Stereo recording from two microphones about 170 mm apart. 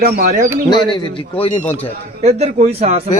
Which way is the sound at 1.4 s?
40° left (ahead or behind).